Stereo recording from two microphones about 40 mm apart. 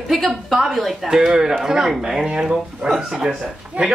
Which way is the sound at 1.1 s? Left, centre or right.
Centre.